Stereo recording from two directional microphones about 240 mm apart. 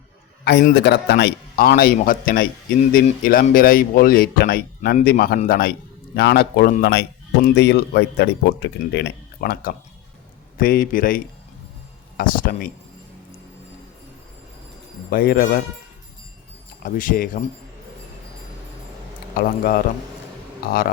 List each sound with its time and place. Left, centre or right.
0.4 s speech: left
15.1 s speech: left
16.8 s speech: left
19.4 s speech: left